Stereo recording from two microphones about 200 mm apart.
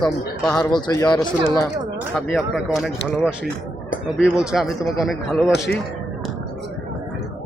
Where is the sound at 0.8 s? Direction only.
20° left (ahead or behind).